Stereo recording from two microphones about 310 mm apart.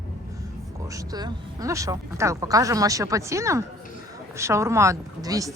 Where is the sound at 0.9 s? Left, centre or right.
Centre.